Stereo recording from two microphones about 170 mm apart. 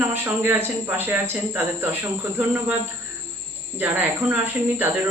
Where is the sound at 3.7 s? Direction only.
10° right (ahead or behind).